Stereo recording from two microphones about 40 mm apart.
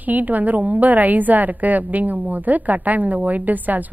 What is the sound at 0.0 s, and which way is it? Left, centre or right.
A woman's voice, right.